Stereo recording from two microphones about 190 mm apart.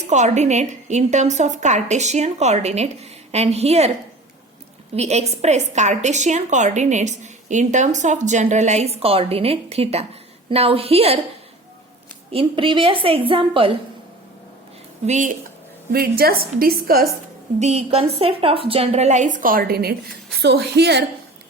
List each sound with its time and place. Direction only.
0.1 s a woman's voice: 40° right (ahead or behind)
4.9 s a woman's voice: 35° right (ahead or behind)
12.3 s a woman's voice: 30° right (ahead or behind)
15.0 s a woman's voice: 40° right (ahead or behind)
15.9 s a woman's voice: 55° right (ahead or behind)
17.6 s a woman's voice: 35° right (ahead or behind); by 21.0 s 60° right (ahead or behind)